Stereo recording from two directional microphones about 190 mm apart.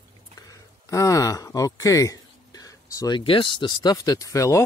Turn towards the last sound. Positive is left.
turn(degrees=15)  # may be behind; listen again after turning